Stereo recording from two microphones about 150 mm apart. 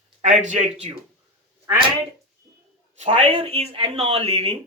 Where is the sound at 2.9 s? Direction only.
40° right (ahead or behind).